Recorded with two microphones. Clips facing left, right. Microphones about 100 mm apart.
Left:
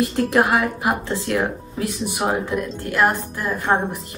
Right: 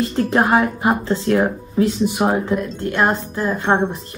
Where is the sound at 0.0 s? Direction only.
30° right (ahead or behind).